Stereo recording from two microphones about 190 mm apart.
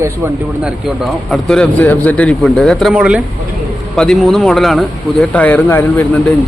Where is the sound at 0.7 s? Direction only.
Centre (ahead or behind).